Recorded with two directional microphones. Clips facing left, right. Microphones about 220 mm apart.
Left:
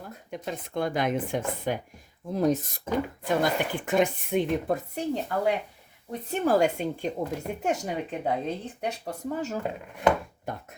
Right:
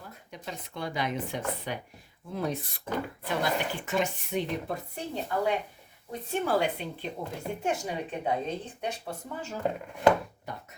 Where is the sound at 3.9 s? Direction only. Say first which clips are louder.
Left 7 dB; 55° left (ahead or behind).